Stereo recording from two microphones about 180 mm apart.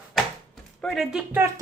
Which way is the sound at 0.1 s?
Centre (ahead or behind).